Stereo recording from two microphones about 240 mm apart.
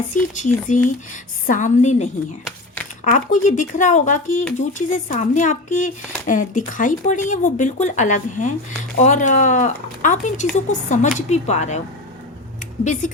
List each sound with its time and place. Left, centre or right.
0.1 s speech: left
12.8 s speech: left